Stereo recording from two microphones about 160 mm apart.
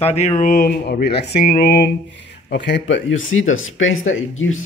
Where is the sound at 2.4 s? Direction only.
90° left.